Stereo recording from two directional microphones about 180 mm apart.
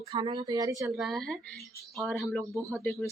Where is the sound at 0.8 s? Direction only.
5° right (ahead or behind).